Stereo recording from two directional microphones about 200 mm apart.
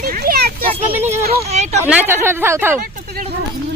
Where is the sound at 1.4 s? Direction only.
35° right (ahead or behind).